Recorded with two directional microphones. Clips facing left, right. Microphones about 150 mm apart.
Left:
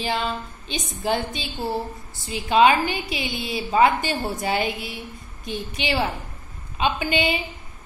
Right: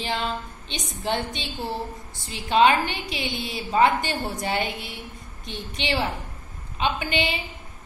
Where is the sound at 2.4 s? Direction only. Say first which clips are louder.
Left 2 dB; 10° left (ahead or behind).